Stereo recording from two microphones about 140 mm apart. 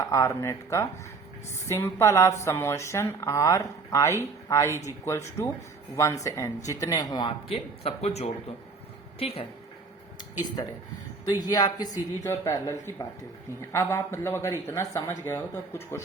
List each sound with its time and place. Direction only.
0.0 s speech: 20° left (ahead or behind)
7.9 s speech: 45° left (ahead or behind)
11.3 s speech: 25° left (ahead or behind)